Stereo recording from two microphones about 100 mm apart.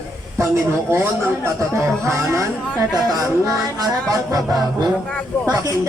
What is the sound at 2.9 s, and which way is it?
Music, 40° right (ahead or behind).